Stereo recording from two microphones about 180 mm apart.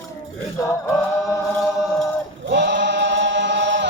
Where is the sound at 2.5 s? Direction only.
70° right (ahead or behind).